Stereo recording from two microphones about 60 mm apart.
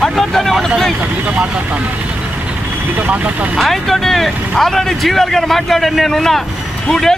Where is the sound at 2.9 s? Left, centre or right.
Right.